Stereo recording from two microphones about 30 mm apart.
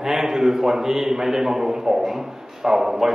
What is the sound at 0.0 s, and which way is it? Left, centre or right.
A man's voice, centre.